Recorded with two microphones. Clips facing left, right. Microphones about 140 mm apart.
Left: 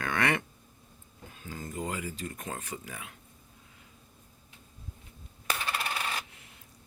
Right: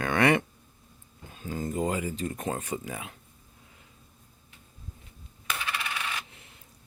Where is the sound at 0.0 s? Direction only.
25° right (ahead or behind).